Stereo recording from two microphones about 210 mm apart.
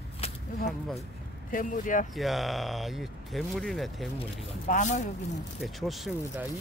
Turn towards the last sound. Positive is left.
turn(degrees=0)  # may be behind; listen again after turning